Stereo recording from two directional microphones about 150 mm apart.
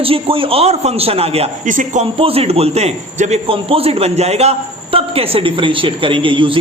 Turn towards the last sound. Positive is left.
turn(degrees=-35)  # may be behind; listen again after turning